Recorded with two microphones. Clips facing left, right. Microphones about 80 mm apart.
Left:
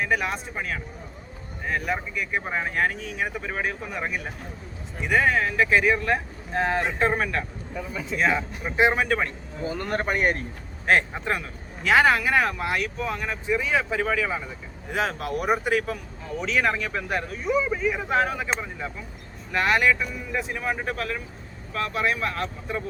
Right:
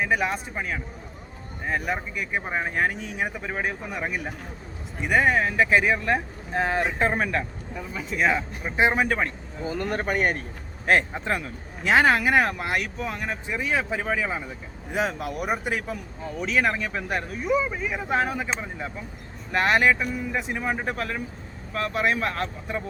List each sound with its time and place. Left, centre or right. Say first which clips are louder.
0.0 s speech: right 1 dB; centre
1.6 s speech: even; centre
9.6 s speech: even; centre
11.8 s speech: even; right
15.2 s speech: left 3 dB; left
16.4 s speech: even; centre
19.5 s speech: right 1 dB; right
20.0 s speech: right 1 dB; centre